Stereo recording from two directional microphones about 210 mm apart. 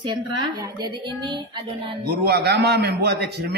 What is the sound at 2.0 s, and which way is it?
A man's voice, 50° right (ahead or behind).